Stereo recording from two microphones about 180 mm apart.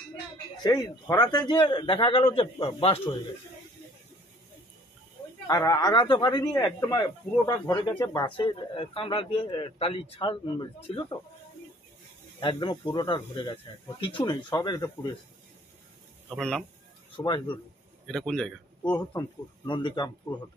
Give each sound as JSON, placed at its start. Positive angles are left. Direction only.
{"t": 0.7, "sound": "speech", "side_deg": 20}
{"t": 5.5, "sound": "speech", "side_deg": 20}
{"t": 12.4, "sound": "speech", "side_deg": 25}
{"t": 16.3, "sound": "speech", "side_deg": 5}
{"t": 17.2, "sound": "speech", "side_deg": 25}
{"t": 18.0, "sound": "speech", "side_deg": 5}
{"t": 18.9, "sound": "speech", "side_deg": 25}